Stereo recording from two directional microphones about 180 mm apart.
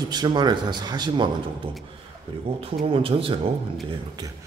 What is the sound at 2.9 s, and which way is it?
Speech, 30° right (ahead or behind).